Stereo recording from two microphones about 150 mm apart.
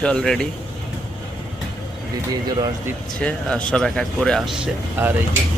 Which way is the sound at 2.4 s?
25° right (ahead or behind).